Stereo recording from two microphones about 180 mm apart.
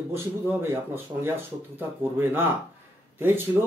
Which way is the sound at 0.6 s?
15° right (ahead or behind).